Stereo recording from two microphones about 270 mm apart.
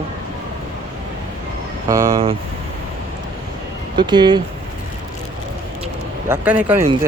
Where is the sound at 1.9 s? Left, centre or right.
Centre.